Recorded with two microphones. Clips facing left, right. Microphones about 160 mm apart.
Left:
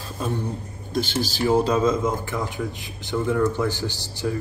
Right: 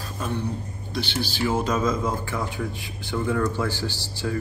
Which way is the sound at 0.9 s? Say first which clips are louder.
Left 3 dB; 45° left (ahead or behind).